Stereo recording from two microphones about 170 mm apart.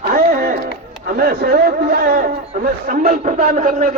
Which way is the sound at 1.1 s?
65° right (ahead or behind).